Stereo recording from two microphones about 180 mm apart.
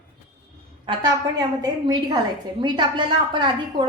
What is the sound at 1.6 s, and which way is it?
A woman's voice, 25° right (ahead or behind).